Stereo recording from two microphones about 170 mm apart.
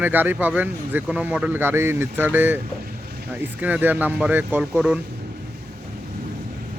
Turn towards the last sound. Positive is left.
turn(degrees=-10)  # may be behind; listen again after turning